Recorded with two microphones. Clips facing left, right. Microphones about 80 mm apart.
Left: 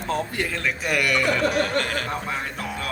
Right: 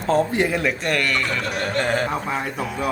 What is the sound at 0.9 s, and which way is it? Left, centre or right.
Speech, centre.